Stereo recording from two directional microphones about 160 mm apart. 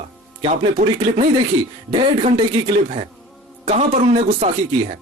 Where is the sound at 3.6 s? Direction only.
40° right (ahead or behind).